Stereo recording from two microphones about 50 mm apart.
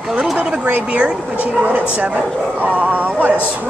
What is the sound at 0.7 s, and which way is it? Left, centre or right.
Speech, right.